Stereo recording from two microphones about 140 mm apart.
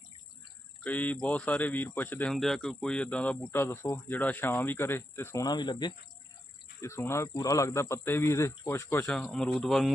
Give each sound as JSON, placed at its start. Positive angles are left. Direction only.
{"t": 0.9, "sound": "speech", "side_deg": 10}
{"t": 2.3, "sound": "speech", "side_deg": 0}
{"t": 6.8, "sound": "speech", "side_deg": 20}
{"t": 9.0, "sound": "speech", "side_deg": 5}